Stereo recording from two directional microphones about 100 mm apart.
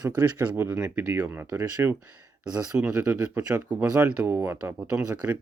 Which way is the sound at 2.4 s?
10° right (ahead or behind).